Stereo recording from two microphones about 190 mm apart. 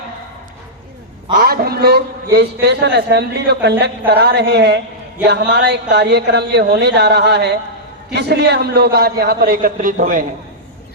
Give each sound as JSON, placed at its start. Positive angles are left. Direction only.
{"t": 1.3, "sound": "a man's voice", "side_deg": -50}